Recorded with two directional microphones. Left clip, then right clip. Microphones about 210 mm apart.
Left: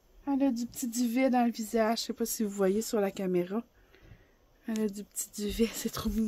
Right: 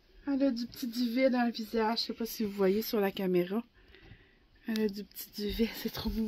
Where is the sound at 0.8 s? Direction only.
45° left (ahead or behind); by 3.6 s 15° left (ahead or behind).